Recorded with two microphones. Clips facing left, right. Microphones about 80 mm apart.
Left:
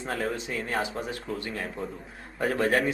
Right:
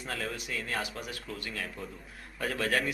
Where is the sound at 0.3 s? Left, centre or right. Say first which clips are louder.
Left 5 dB; left.